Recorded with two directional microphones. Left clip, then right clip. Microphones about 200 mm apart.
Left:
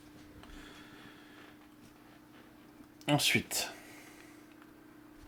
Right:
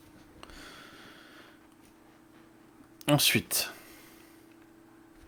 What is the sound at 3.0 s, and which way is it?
Speech, 30° right (ahead or behind).